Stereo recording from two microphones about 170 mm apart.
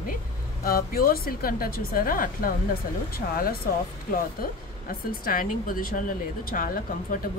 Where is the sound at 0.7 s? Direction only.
60° left (ahead or behind).